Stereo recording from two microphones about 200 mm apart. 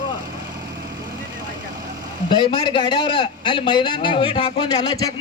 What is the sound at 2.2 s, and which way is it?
A man's voice, 25° left (ahead or behind).